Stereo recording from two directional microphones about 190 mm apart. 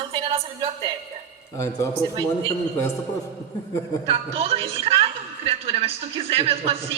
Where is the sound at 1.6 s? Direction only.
15° left (ahead or behind).